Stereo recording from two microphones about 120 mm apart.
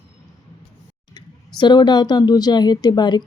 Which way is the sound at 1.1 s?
40° left (ahead or behind).